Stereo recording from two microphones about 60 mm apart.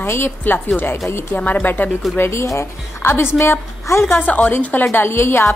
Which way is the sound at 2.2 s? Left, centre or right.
Left.